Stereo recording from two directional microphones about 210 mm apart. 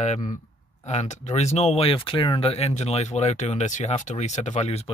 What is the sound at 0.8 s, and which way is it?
Speech, 35° left (ahead or behind).